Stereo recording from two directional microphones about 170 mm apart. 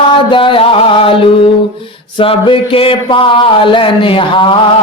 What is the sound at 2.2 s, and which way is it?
Mantra, 30° left (ahead or behind).